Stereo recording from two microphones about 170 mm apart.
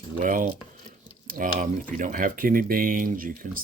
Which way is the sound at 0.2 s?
50° right (ahead or behind).